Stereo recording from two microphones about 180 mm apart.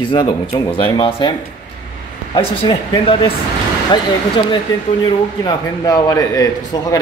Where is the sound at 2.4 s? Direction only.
30° left (ahead or behind).